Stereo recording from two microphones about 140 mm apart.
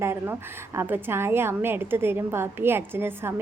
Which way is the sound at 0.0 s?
20° right (ahead or behind).